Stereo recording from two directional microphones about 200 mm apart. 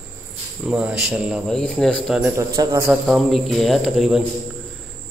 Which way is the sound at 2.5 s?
15° right (ahead or behind).